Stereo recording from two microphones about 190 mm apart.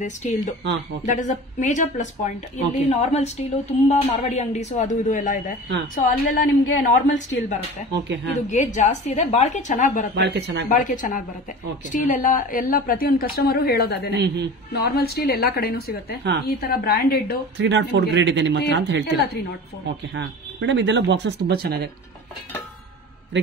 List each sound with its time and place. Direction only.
0.0 s a woman's voice: 40° left (ahead or behind)
7.9 s speech: 65° right (ahead or behind)
8.7 s a woman's voice: 40° left (ahead or behind)
10.1 s speech: 65° right (ahead or behind)
10.7 s a woman's voice: 45° left (ahead or behind)
14.1 s speech: 65° right (ahead or behind)
14.7 s a woman's voice: 55° left (ahead or behind)
17.6 s speech: 70° right (ahead or behind)
20.2 s speech: 70° right (ahead or behind)